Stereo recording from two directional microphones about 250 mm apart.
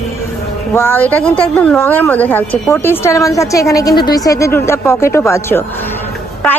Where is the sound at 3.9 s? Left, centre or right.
Left.